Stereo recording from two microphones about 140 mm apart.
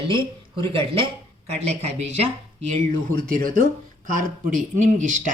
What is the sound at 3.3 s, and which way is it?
Speech, 80° right.